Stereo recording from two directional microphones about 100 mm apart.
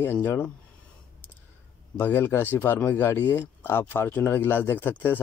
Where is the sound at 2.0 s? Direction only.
20° left (ahead or behind).